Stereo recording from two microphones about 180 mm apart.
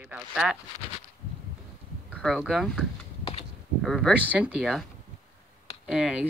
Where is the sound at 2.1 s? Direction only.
Centre (ahead or behind).